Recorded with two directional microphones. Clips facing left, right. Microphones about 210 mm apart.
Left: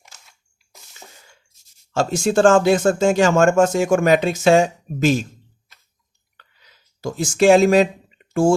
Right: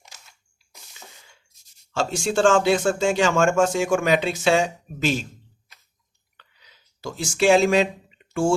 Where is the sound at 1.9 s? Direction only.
45° left (ahead or behind).